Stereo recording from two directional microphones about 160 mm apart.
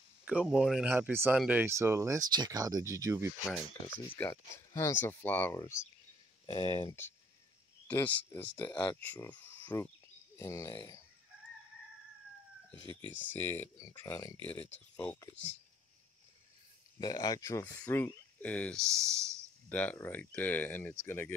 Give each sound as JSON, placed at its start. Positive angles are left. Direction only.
{"t": 0.2, "sound": "speech", "side_deg": -5}
{"t": 4.1, "sound": "speech", "side_deg": 15}
{"t": 6.4, "sound": "speech", "side_deg": 30}
{"t": 7.9, "sound": "speech", "side_deg": 10}
{"t": 8.6, "sound": "speech", "side_deg": 25}
{"t": 8.9, "sound": "speech", "side_deg": 10}
{"t": 12.7, "sound": "speech", "side_deg": -30}
{"t": 13.3, "sound": "speech", "side_deg": 15}
{"t": 17.0, "sound": "speech", "side_deg": 25}